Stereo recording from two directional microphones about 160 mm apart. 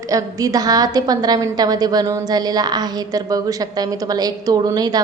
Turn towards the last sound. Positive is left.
turn(degrees=-25)  # may be behind; listen again after turning